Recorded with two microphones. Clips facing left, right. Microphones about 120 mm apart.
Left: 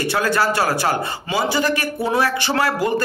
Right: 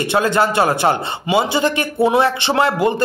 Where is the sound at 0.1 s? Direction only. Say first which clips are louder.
Right 4 dB; 20° right (ahead or behind).